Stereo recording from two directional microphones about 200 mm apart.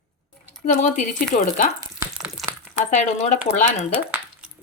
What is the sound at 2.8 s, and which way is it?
A woman's voice, 40° left (ahead or behind).